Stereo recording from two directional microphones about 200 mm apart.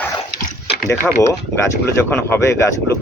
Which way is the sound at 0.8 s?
15° left (ahead or behind).